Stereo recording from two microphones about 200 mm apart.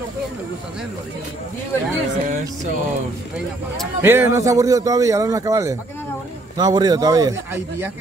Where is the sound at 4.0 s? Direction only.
10° right (ahead or behind).